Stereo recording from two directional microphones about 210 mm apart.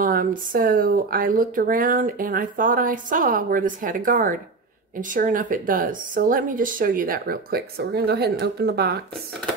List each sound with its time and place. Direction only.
0.0 s speech: 40° right (ahead or behind)